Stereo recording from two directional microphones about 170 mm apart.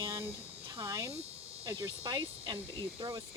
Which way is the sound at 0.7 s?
15° right (ahead or behind).